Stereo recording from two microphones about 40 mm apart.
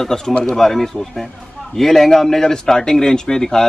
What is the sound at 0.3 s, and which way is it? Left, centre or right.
Speech, left.